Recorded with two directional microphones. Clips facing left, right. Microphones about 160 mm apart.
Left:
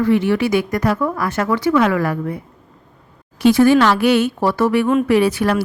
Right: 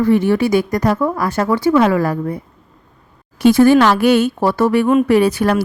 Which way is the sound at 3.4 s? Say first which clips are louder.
Right 2 dB; 45° right (ahead or behind).